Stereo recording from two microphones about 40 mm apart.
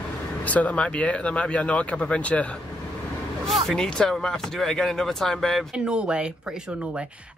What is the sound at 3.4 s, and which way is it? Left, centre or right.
Speech, centre.